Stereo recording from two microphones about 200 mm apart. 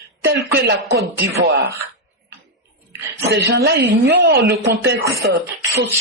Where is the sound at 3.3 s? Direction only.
55° right (ahead or behind).